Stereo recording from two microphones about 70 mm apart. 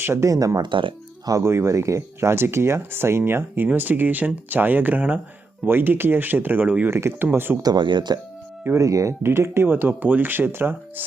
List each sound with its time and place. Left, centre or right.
0.0 s speech: right
1.4 s speech: right
7.6 s speech: right
8.8 s speech: right
9.2 s speech: right